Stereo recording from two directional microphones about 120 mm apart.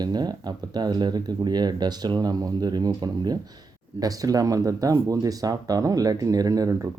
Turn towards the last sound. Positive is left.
turn(degrees=-30)  # may be behind; listen again after turning